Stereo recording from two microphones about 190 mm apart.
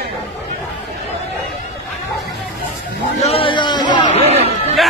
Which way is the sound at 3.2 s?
30° left (ahead or behind).